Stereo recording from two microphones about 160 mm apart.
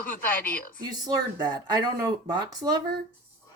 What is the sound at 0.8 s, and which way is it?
Speech, 25° right (ahead or behind).